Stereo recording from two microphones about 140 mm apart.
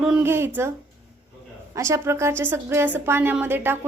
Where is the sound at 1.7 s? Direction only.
20° right (ahead or behind).